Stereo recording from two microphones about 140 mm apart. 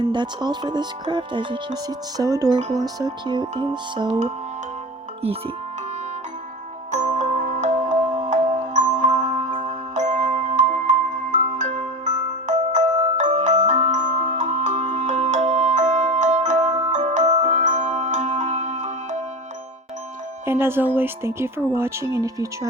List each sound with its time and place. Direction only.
0.1 s speech: 30° right (ahead or behind)
2.6 s speech: 55° right (ahead or behind)
2.8 s speech: 30° right (ahead or behind)
7.0 s music: 60° right (ahead or behind)
12.5 s marimba: 55° right (ahead or behind)
14.3 s music: 55° right (ahead or behind)
16.9 s glockenspiel: 55° right (ahead or behind)
20.4 s speech: 15° right (ahead or behind)